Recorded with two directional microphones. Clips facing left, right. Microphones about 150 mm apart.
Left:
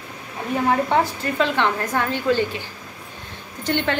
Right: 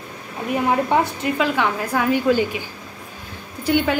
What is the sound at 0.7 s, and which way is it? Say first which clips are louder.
A woman's voice: even; 15° right (ahead or behind).